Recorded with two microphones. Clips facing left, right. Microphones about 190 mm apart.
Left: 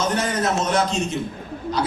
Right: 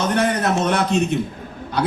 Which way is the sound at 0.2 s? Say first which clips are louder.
Right 3 dB; 60° right (ahead or behind).